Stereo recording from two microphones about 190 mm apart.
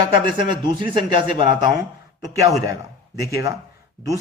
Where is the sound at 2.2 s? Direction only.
15° right (ahead or behind).